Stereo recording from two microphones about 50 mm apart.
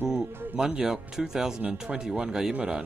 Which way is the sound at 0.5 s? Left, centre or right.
Centre.